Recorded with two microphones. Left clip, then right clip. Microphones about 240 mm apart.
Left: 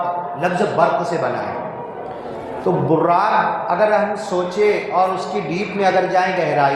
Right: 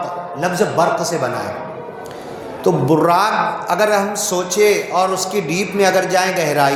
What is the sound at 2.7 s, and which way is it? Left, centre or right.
A man's voice, right.